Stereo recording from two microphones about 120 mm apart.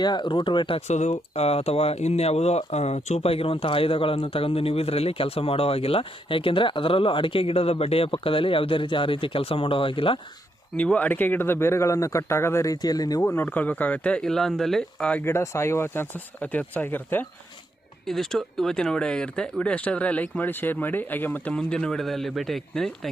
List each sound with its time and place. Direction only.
0.0 s speech: 40° left (ahead or behind)
0.9 s speech: 70° left (ahead or behind); by 10.2 s 45° left (ahead or behind)
10.8 s speech: 10° left (ahead or behind); by 13.2 s 30° left (ahead or behind)
13.2 s speech: 20° left (ahead or behind)
15.3 s speech: 20° left (ahead or behind)
18.0 s speech: 5° left (ahead or behind)